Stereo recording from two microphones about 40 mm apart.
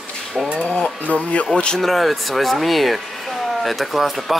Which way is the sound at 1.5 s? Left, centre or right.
Centre.